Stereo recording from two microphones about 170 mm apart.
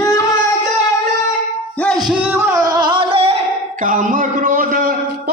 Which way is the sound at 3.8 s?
50° right (ahead or behind).